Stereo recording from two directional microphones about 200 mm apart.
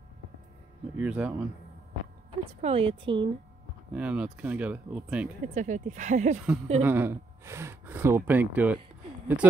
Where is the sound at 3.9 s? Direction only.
5° right (ahead or behind).